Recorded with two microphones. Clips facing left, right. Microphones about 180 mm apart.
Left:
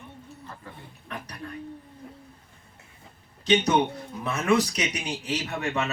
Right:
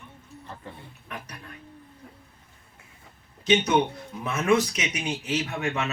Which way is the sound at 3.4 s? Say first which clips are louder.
Even; 35° left (ahead or behind).